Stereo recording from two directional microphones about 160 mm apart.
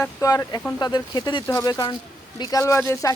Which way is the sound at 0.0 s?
20° left (ahead or behind).